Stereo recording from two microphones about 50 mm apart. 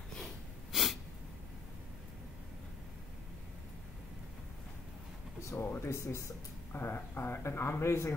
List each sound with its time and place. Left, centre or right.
0.2 s snort: centre
5.7 s speech: left
6.7 s speech: left